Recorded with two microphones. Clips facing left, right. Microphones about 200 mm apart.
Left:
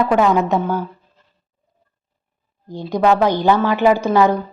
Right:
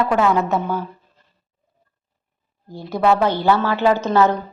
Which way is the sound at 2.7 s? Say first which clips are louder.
Left 2 dB; 15° left (ahead or behind).